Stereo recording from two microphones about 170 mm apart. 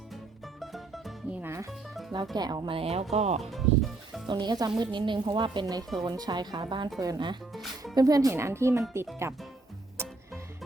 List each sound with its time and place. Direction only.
0.6 s music: centre (ahead or behind)
1.4 s music: 15° right (ahead or behind)
1.9 s music: centre (ahead or behind)
2.3 s speech: 25° right (ahead or behind); by 3.4 s 40° right (ahead or behind)
3.4 s speech: centre (ahead or behind)
4.3 s a woman's voice: 25° right (ahead or behind)
10.0 s music: 15° right (ahead or behind)